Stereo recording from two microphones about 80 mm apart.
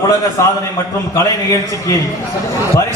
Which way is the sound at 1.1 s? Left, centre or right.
Left.